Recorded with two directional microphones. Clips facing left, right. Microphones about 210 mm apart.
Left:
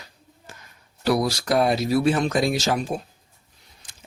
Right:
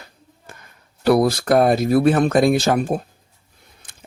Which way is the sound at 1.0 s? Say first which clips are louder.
Right 6 dB; 55° right (ahead or behind).